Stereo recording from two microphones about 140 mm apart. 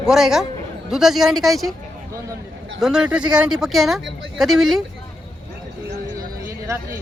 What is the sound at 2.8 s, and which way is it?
Speech, 5° right (ahead or behind).